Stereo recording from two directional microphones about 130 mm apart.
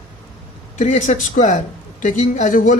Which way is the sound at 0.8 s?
75° left (ahead or behind).